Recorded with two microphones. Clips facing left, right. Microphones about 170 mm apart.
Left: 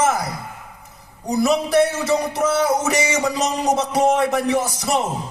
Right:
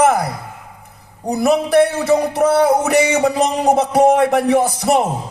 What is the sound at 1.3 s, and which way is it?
Speech, 55° right (ahead or behind).